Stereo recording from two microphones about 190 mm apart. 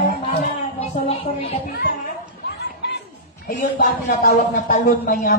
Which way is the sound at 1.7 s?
50° left (ahead or behind).